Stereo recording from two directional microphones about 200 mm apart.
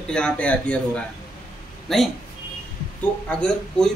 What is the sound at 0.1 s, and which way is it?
Speech, 5° left (ahead or behind).